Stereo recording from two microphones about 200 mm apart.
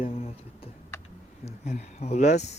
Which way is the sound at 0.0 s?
30° left (ahead or behind).